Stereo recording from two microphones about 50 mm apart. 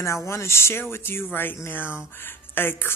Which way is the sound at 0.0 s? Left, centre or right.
Left.